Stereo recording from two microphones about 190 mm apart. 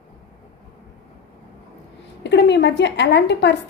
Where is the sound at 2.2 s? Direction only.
65° left (ahead or behind).